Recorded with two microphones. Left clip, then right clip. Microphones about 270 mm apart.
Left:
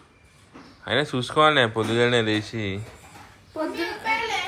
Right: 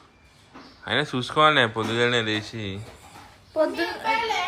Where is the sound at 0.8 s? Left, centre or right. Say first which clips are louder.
Left 1 dB; centre.